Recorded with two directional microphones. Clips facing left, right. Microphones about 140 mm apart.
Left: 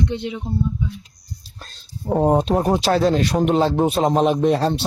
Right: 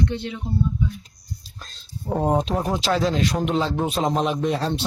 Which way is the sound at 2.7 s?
40° left (ahead or behind).